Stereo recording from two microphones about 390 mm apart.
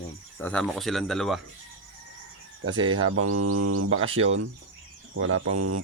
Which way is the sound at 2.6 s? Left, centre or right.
Centre.